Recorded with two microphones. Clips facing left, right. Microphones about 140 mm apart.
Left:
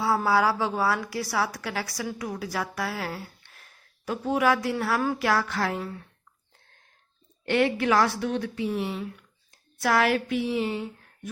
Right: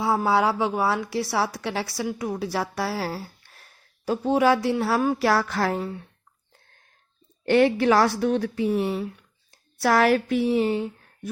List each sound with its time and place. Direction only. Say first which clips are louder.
0.0 s a woman's voice: right 2 dB; 20° right (ahead or behind)
5.2 s a woman's voice: right 3 dB; 35° right (ahead or behind)
7.4 s a woman's voice: right 5 dB; 35° right (ahead or behind)
9.5 s speech: right 3 dB; 35° right (ahead or behind)